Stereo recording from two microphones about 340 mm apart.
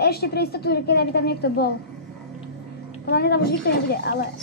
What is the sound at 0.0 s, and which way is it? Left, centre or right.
A woman's voice, left.